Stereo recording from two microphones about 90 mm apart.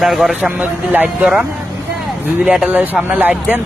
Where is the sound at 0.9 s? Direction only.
20° right (ahead or behind).